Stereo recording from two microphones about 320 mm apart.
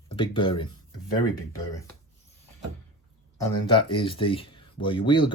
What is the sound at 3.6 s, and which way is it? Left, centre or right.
Speech, centre.